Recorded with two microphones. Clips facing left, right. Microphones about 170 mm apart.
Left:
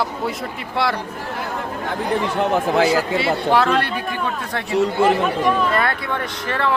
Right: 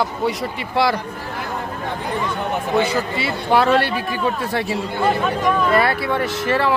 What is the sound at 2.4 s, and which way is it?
Speech, 90° left.